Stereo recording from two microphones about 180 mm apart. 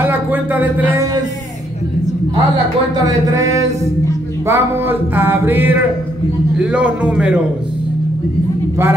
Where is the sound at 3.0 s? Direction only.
15° right (ahead or behind).